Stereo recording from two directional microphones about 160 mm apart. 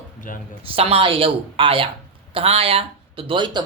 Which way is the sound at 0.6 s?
35° right (ahead or behind).